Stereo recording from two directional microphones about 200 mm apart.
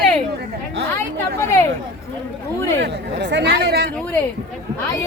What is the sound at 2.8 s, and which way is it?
Speech, 55° right (ahead or behind).